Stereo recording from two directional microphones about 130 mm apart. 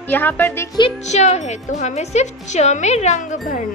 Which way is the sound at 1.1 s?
60° left (ahead or behind).